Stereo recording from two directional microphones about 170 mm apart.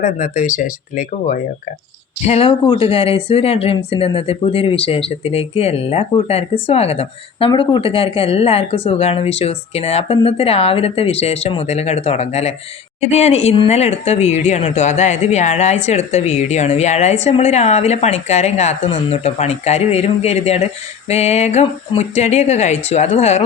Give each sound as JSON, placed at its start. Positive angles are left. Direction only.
{"t": 0.0, "sound": "speech", "side_deg": 50}
{"t": 2.2, "sound": "speech", "side_deg": 35}